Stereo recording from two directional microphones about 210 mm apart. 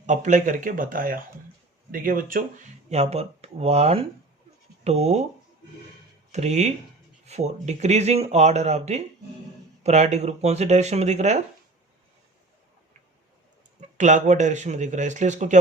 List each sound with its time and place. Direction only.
0.0 s speech: 35° right (ahead or behind)
6.3 s speech: 30° right (ahead or behind)
14.0 s speech: 35° right (ahead or behind)